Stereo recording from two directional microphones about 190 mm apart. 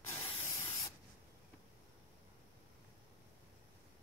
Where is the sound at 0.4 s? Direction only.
15° left (ahead or behind).